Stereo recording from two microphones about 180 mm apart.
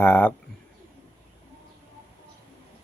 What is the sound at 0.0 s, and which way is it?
Speech, 10° left (ahead or behind).